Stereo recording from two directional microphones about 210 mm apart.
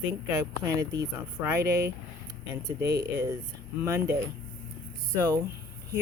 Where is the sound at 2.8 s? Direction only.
50° right (ahead or behind).